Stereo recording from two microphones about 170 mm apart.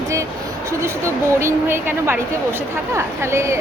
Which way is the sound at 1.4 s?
15° right (ahead or behind).